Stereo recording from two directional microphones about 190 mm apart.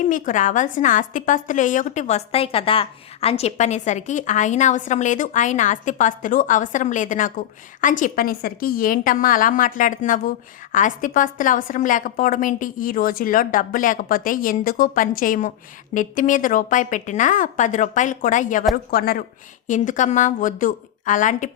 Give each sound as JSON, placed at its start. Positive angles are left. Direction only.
{"t": 0.0, "sound": "a woman's voice", "side_deg": 40}
{"t": 18.9, "sound": "a woman's voice", "side_deg": 50}
{"t": 19.6, "sound": "a woman's voice", "side_deg": 40}